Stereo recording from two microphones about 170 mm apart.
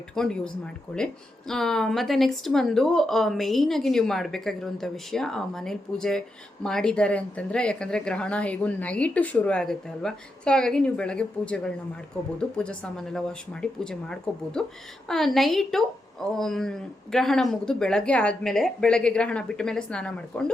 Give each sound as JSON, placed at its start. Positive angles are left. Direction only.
{"t": 0.1, "sound": "a woman's voice", "side_deg": 5}